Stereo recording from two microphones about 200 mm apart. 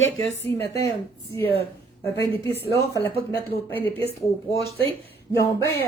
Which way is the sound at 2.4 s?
15° left (ahead or behind).